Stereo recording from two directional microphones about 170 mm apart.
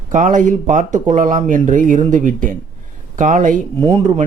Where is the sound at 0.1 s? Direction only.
50° right (ahead or behind).